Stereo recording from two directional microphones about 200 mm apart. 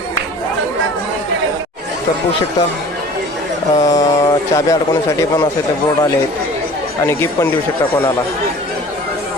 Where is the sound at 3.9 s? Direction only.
15° left (ahead or behind).